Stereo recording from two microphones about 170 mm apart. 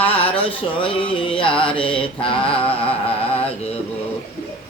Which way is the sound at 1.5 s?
5° left (ahead or behind).